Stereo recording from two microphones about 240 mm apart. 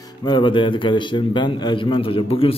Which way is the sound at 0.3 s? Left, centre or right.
Centre.